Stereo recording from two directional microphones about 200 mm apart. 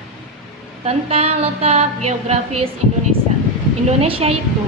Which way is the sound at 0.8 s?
30° right (ahead or behind).